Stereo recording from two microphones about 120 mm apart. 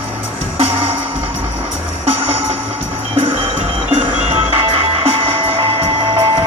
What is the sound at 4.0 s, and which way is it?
Music, 50° right (ahead or behind).